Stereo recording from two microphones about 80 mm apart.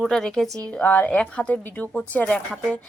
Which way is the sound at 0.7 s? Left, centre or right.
Centre.